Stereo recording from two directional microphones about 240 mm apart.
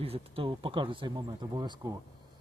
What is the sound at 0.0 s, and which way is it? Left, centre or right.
Speech, right.